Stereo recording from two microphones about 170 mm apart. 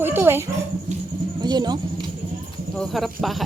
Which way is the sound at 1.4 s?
25° right (ahead or behind).